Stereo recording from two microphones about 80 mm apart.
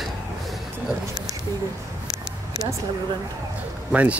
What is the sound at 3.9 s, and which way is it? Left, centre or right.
Speech, centre.